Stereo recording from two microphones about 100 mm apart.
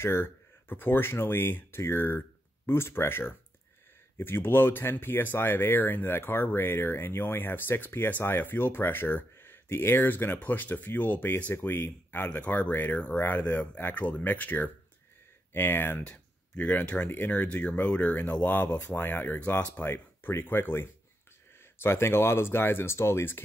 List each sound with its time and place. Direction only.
0.0 s speech: 20° left (ahead or behind)